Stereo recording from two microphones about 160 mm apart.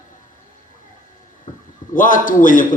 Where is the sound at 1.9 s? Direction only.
55° left (ahead or behind).